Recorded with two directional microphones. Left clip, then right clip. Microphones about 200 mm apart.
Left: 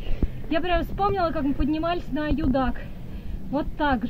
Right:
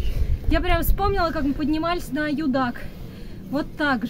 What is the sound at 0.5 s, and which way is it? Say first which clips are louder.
A woman's voice: right 1 dB; 25° right (ahead or behind).